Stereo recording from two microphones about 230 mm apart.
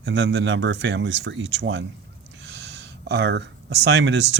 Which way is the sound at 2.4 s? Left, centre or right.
Right.